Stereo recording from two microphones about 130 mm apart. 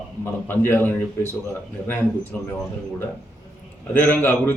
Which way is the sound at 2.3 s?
15° left (ahead or behind).